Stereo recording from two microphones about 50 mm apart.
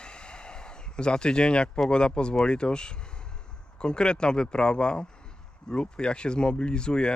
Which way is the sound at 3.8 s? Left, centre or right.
Centre.